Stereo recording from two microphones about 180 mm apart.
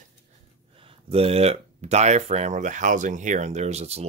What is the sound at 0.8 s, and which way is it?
Speech, 35° right (ahead or behind).